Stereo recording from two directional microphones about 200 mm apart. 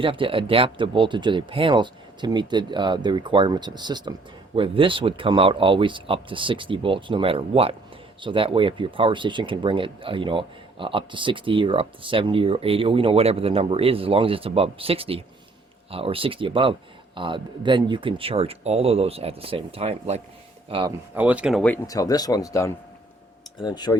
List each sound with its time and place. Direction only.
0.0 s speech: 25° right (ahead or behind)
21.2 s speech: 5° right (ahead or behind)
21.8 s speech: 20° left (ahead or behind)